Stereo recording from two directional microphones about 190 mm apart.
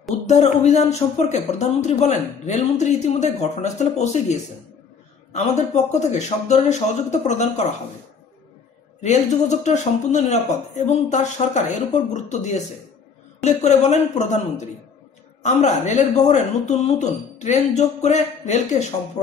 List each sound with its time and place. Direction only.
0.3 s speech: 35° left (ahead or behind)
5.9 s speech: 35° left (ahead or behind)
9.0 s speech: 40° left (ahead or behind)
15.4 s speech: 40° left (ahead or behind)